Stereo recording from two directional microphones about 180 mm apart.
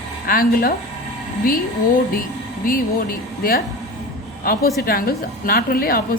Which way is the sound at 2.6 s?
50° left (ahead or behind).